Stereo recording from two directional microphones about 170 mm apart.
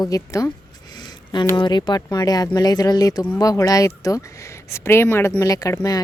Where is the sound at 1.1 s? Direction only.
25° left (ahead or behind).